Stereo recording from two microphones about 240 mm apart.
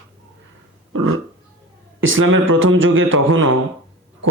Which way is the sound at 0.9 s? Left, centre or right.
Right.